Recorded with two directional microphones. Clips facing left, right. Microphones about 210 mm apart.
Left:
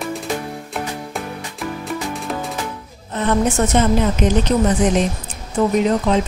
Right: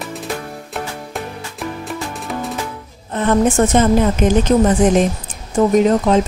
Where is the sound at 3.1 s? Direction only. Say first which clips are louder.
Right 3 dB; 50° right (ahead or behind).